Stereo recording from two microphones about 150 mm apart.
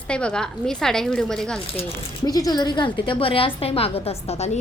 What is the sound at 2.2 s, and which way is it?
A woman's voice, 25° left (ahead or behind).